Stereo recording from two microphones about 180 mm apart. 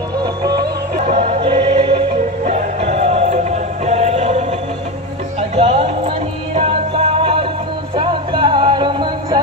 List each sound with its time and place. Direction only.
0.2 s music: 20° right (ahead or behind); by 4.6 s 40° right (ahead or behind)
5.6 s music: 30° right (ahead or behind)